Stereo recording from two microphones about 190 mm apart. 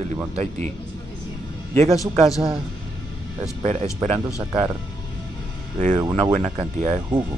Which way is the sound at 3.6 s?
35° right (ahead or behind).